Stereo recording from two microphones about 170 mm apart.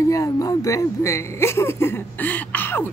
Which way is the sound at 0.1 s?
20° left (ahead or behind).